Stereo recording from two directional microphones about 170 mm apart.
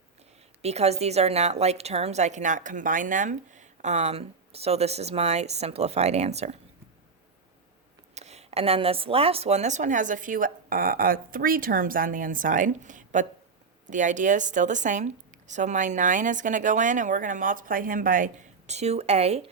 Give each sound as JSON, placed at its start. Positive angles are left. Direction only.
{"t": 0.6, "sound": "a woman's voice", "side_deg": -40}
{"t": 8.1, "sound": "a woman's voice", "side_deg": -40}